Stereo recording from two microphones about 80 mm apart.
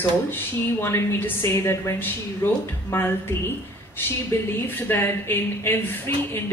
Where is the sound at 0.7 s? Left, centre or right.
Left.